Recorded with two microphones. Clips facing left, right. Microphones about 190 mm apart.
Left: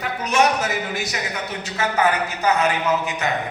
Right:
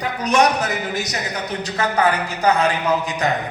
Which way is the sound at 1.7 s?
35° right (ahead or behind).